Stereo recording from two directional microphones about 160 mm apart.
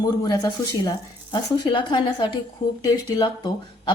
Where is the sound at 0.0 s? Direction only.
25° left (ahead or behind).